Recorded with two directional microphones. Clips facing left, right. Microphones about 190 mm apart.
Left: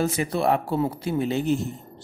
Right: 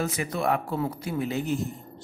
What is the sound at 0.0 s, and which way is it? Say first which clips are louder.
Speech: left 4 dB; 30° left (ahead or behind).